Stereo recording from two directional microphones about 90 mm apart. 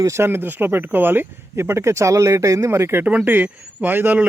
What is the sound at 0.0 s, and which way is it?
Speech, 30° right (ahead or behind).